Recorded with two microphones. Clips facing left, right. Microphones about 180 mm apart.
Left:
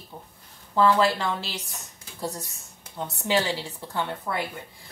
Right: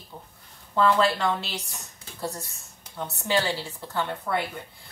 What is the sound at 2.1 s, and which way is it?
Speech, 15° left (ahead or behind).